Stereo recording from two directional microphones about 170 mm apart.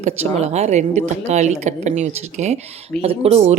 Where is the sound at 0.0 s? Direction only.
40° right (ahead or behind).